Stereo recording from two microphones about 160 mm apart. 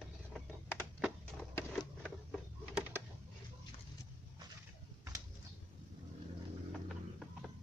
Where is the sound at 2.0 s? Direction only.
Centre (ahead or behind).